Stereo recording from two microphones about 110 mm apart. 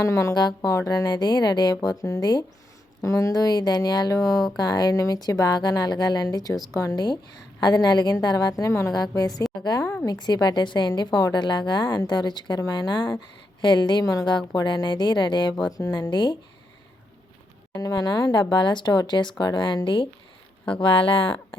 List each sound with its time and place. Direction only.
0.0 s a woman's voice: 30° left (ahead or behind); by 16.4 s 45° left (ahead or behind)
17.7 s a woman's voice: 35° left (ahead or behind); by 21.2 s 50° left (ahead or behind)